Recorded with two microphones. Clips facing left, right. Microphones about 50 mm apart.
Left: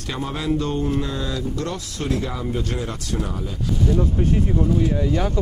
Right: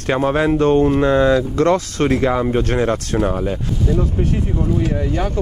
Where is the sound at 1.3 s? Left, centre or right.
Right.